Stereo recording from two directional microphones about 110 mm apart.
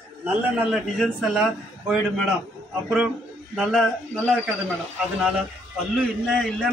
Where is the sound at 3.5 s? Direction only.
5° right (ahead or behind).